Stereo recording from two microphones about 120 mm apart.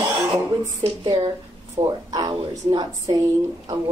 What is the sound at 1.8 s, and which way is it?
Speech, 35° right (ahead or behind).